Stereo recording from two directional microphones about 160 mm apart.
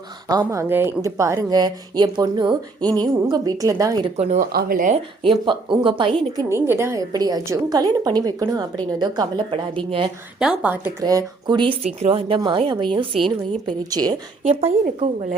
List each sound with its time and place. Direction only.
0.3 s a woman's voice: 25° right (ahead or behind)
4.0 s speech: 45° right (ahead or behind)
4.5 s speech: 60° right (ahead or behind)
5.2 s speech: 30° right (ahead or behind)
6.5 s a woman's voice: 15° right (ahead or behind); by 10.1 s 35° right (ahead or behind)
10.4 s speech: 5° right (ahead or behind)
11.0 s a woman's voice: 25° right (ahead or behind)
11.9 s a woman's voice: 40° right (ahead or behind)
14.4 s speech: 45° right (ahead or behind)